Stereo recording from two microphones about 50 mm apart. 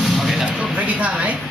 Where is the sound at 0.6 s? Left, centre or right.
Right.